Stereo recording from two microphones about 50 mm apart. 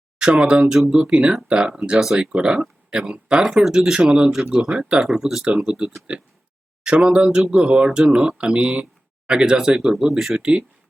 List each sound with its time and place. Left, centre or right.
0.2 s speech: centre
1.0 s speech: right; by 4.1 s centre
4.1 s speech: centre
6.8 s speech: centre